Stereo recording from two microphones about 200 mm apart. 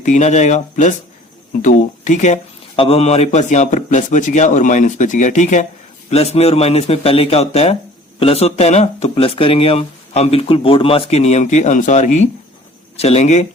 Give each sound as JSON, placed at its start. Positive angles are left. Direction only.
{"t": 0.0, "sound": "speech", "side_deg": 35}